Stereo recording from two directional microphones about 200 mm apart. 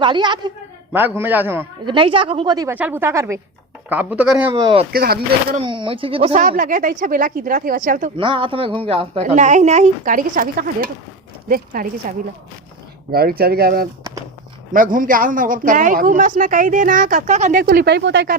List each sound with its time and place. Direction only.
0.0 s speech: 25° right (ahead or behind)
0.9 s speech: 10° right (ahead or behind)
1.9 s speech: 25° right (ahead or behind); by 4.5 s 5° right (ahead or behind)
4.5 s speech: 25° right (ahead or behind)
4.9 s speech: 50° right (ahead or behind)
5.5 s speech: 25° right (ahead or behind)
6.6 s speech: 40° right (ahead or behind)
8.1 s a man's voice: 25° right (ahead or behind); by 11.9 s 45° right (ahead or behind)
13.1 s a man's voice: 50° right (ahead or behind)
17.6 s speech: 50° right (ahead or behind)